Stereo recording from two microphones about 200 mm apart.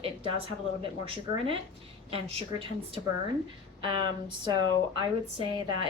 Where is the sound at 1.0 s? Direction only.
25° right (ahead or behind).